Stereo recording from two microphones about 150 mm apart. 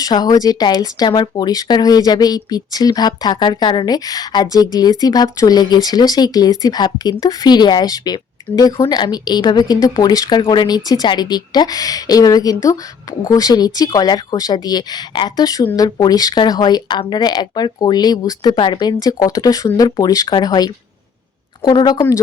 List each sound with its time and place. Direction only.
0.0 s speech: 25° left (ahead or behind)